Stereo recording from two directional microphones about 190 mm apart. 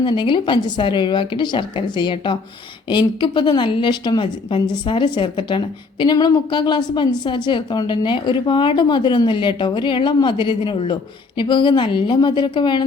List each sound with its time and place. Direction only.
0.0 s a woman's voice: 25° left (ahead or behind)